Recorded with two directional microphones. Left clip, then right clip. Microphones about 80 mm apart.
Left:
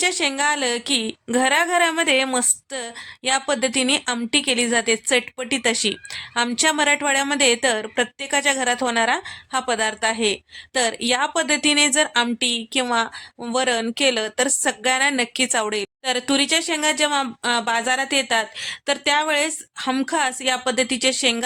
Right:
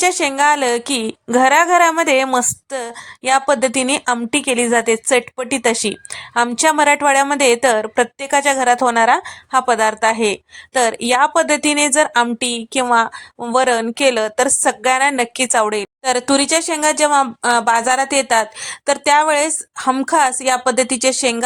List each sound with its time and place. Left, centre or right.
0.0 s a woman's voice: right
16.0 s speech: right